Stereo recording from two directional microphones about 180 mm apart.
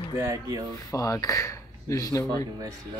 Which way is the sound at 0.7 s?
20° left (ahead or behind).